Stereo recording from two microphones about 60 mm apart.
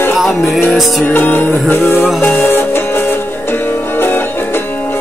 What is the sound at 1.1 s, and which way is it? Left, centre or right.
Music, left.